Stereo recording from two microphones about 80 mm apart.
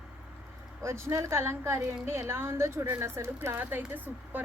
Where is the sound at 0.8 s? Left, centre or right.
Right.